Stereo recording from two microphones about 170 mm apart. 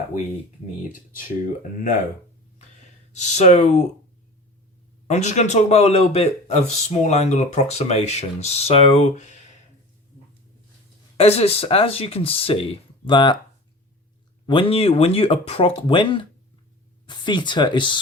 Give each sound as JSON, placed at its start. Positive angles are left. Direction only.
{"t": 3.1, "sound": "speech", "side_deg": 45}
{"t": 5.0, "sound": "speech", "side_deg": 45}
{"t": 11.2, "sound": "speech", "side_deg": 35}
{"t": 14.4, "sound": "speech", "side_deg": 30}